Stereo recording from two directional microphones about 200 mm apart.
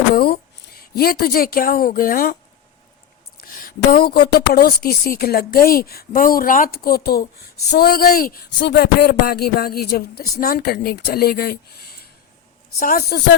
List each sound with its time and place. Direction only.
0.1 s a woman's voice: 50° left (ahead or behind)
3.4 s speech: 45° left (ahead or behind)